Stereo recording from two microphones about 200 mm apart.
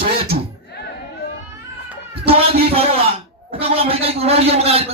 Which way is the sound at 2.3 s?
30° right (ahead or behind).